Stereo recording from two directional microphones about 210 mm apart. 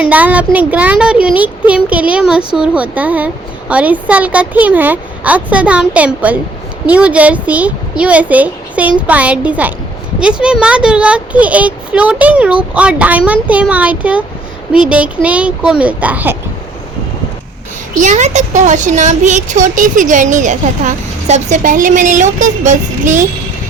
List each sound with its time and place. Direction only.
0.0 s speech: 5° right (ahead or behind)
18.0 s speech: 35° right (ahead or behind)